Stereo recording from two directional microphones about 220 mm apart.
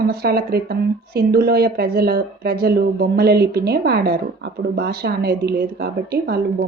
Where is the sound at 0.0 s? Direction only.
45° right (ahead or behind).